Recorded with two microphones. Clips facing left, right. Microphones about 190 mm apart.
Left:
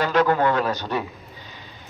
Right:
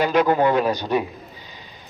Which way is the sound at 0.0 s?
15° right (ahead or behind).